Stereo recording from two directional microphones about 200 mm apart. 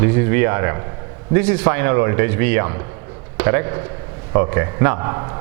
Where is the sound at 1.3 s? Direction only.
10° right (ahead or behind).